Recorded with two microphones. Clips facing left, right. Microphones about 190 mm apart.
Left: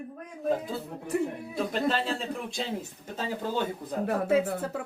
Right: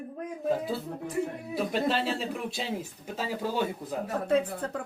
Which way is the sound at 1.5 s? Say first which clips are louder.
Right 1 dB; 5° right (ahead or behind).